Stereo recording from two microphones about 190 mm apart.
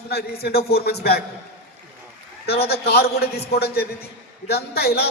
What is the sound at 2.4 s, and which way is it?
A man's voice, 55° left (ahead or behind).